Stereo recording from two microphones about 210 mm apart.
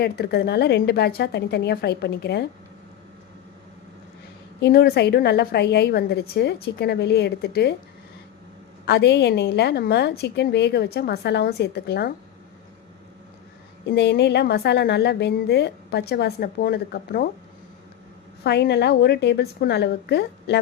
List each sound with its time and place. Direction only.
0.0 s a woman's voice: 50° left (ahead or behind)
4.6 s a woman's voice: 50° left (ahead or behind)
8.9 s a woman's voice: 55° left (ahead or behind)
13.9 s a woman's voice: 50° left (ahead or behind)
18.4 s a woman's voice: 50° left (ahead or behind)